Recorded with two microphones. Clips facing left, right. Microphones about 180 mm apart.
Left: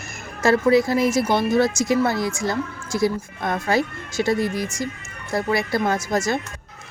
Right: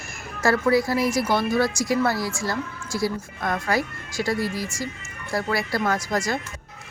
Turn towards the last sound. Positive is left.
turn(degrees=25)  # may be behind; listen again after turning